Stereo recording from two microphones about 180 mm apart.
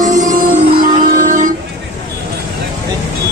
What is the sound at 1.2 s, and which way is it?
Vehicle, 45° right (ahead or behind).